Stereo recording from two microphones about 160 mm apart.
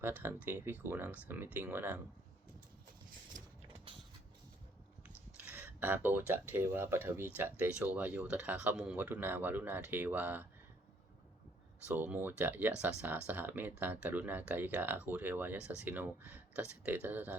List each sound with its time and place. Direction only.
0.0 s speech: 15° right (ahead or behind)
3.3 s a sound: 55° right (ahead or behind)
5.4 s speech: 10° right (ahead or behind)
11.9 s speech: 10° right (ahead or behind)